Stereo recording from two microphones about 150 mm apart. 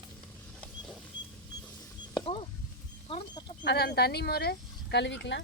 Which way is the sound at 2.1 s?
35° left (ahead or behind).